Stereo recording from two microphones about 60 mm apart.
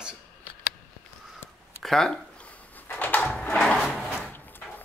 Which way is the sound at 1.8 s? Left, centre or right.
Centre.